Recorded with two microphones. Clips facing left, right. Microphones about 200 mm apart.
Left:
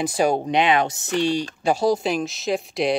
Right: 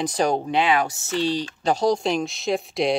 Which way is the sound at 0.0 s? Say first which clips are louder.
Left 2 dB; 10° left (ahead or behind).